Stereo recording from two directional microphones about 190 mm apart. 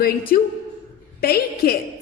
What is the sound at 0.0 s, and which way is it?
A woman's voice, 50° left (ahead or behind).